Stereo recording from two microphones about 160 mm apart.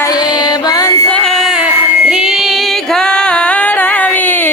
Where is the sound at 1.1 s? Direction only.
5° left (ahead or behind).